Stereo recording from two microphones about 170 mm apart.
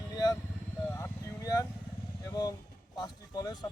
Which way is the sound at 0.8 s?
10° left (ahead or behind).